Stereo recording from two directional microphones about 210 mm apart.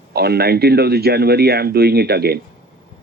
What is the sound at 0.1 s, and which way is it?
Speech, 50° right (ahead or behind).